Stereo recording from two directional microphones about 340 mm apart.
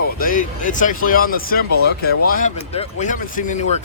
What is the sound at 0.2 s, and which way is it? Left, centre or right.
Speech, left.